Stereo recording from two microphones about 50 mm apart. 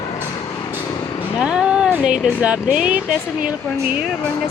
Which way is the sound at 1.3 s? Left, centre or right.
Centre.